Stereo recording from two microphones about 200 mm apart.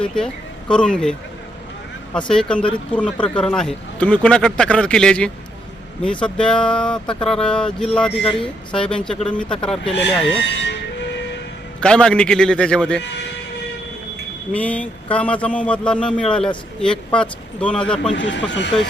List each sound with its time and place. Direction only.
0.0 s speech: 5° left (ahead or behind)
2.1 s a man's voice: 5° left (ahead or behind)
10.3 s train: 60° left (ahead or behind)
11.8 s speech: 5° left (ahead or behind)
13.0 s speech: 60° left (ahead or behind)
14.5 s a man's voice: 5° left (ahead or behind)
18.1 s speech: 65° left (ahead or behind)
18.7 s speech: 5° left (ahead or behind)